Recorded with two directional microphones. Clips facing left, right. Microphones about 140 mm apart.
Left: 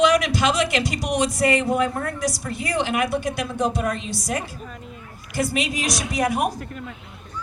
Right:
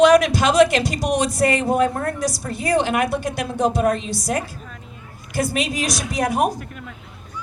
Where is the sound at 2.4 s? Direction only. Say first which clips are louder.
Right 7 dB; 35° right (ahead or behind).